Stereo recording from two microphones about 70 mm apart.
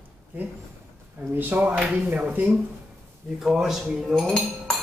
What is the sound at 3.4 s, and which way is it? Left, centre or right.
Speech, centre.